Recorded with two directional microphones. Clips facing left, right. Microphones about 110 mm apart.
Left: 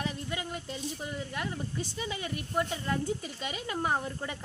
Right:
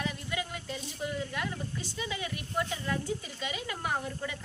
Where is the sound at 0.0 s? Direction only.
30° left (ahead or behind).